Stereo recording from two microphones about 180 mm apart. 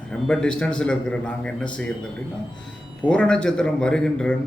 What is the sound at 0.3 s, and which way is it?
Speech, 5° left (ahead or behind).